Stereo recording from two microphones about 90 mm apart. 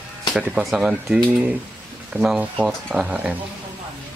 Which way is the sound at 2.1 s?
30° right (ahead or behind).